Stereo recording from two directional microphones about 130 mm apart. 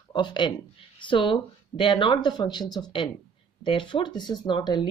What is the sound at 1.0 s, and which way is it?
Speech, 40° left (ahead or behind).